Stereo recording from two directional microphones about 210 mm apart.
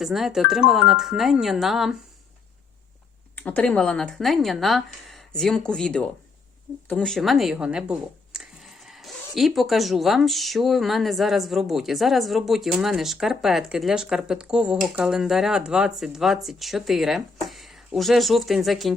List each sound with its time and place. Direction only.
0.0 s speech: centre (ahead or behind)
3.3 s speech: 5° left (ahead or behind)